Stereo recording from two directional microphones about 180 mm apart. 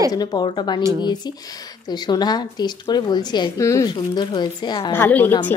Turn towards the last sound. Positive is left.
turn(degrees=10)  # may be behind; listen again after turning